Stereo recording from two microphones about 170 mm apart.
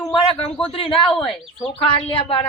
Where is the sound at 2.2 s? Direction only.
30° left (ahead or behind).